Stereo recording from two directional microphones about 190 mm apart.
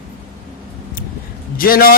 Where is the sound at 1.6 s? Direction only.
50° left (ahead or behind).